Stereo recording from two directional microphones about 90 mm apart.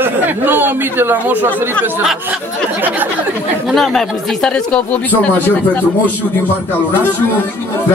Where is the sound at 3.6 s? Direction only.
5° left (ahead or behind); by 5.8 s 20° left (ahead or behind).